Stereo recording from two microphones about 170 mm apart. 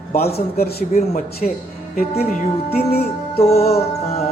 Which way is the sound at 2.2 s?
40° left (ahead or behind).